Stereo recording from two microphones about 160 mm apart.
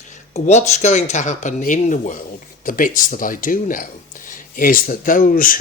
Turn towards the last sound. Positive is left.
turn(degrees=60)  # may be behind; listen again after turning